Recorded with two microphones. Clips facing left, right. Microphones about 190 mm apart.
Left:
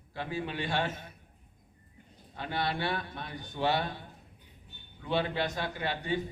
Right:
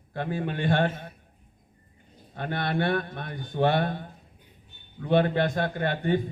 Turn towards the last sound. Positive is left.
turn(degrees=-55)  # may be behind; listen again after turning